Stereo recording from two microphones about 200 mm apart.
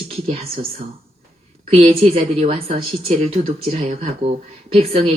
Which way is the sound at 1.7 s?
30° right (ahead or behind).